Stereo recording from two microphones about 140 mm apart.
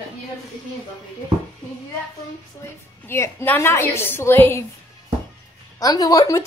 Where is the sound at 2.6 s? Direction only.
20° left (ahead or behind).